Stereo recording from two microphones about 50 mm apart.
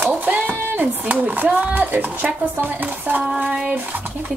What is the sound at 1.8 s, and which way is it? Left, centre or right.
Speech, right.